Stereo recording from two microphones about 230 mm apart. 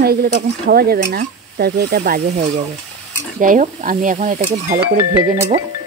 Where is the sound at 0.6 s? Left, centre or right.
Right.